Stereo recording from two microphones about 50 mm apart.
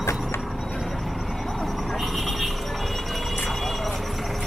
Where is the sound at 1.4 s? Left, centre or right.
Centre.